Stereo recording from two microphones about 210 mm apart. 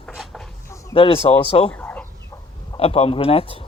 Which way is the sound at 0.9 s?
25° left (ahead or behind).